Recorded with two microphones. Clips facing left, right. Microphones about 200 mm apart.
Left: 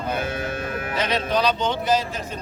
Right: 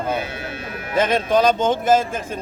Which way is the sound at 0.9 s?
50° right (ahead or behind).